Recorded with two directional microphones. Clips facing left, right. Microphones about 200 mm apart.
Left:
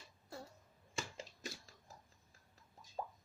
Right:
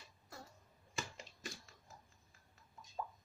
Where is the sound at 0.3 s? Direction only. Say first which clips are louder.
Left 4 dB; 30° left (ahead or behind).